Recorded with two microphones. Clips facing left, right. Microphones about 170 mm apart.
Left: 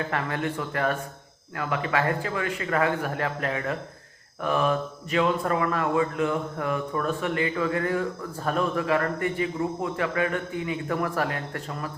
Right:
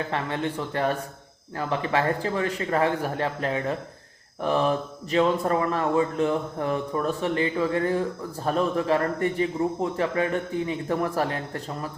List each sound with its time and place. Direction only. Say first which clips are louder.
0.1 s a man's voice: right 1 dB; 25° right (ahead or behind)